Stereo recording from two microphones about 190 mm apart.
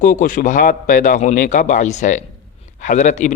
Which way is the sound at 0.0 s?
45° left (ahead or behind).